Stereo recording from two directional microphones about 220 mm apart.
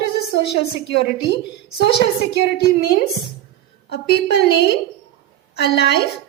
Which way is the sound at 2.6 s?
45° left (ahead or behind).